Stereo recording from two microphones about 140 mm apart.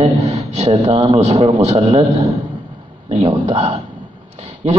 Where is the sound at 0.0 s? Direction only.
50° right (ahead or behind).